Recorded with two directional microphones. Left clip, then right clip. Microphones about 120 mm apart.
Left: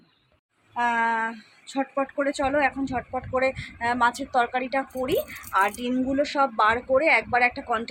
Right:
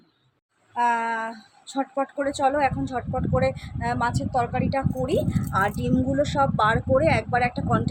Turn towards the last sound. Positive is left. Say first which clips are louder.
# left 1 dB
turn(degrees=-20)  # may be behind; listen again after turning